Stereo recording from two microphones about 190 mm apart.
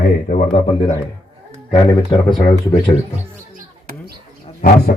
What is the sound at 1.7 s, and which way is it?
Speech, 25° left (ahead or behind).